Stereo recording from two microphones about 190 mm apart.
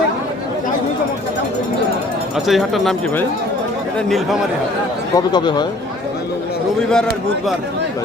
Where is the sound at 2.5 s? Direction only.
Centre (ahead or behind).